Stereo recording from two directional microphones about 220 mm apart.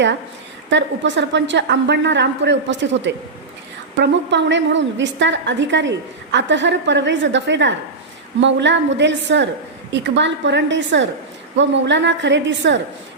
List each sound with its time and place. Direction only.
0.7 s a woman's voice: 55° right (ahead or behind)